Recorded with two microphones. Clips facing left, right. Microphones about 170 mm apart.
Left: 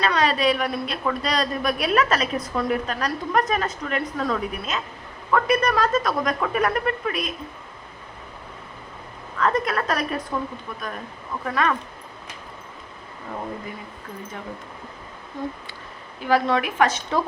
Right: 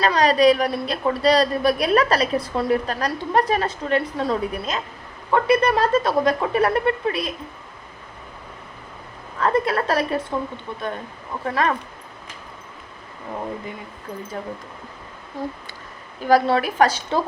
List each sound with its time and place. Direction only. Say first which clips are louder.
0.0 s a woman's voice: right 5 dB; 35° right (ahead or behind)
9.4 s a woman's voice: right 2 dB; 30° right (ahead or behind)
16.2 s a woman's voice: right 3 dB; 35° right (ahead or behind)